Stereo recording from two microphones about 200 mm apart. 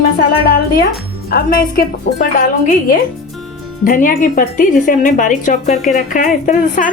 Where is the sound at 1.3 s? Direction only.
45° left (ahead or behind).